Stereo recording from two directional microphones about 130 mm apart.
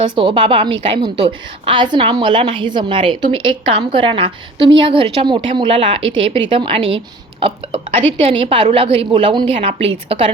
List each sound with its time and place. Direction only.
0.2 s a woman's voice: 40° right (ahead or behind)